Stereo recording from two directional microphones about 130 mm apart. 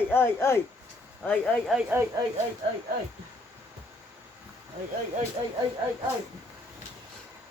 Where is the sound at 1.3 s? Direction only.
10° left (ahead or behind).